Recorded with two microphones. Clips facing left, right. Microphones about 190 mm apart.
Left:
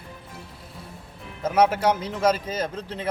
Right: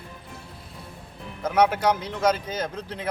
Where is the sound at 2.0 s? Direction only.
30° left (ahead or behind).